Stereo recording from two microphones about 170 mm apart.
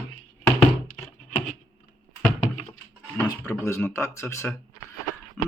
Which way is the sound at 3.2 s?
15° left (ahead or behind).